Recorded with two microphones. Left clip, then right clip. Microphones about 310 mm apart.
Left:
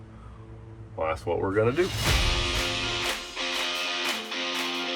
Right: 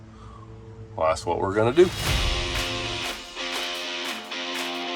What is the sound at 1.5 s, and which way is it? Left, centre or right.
Speech, centre.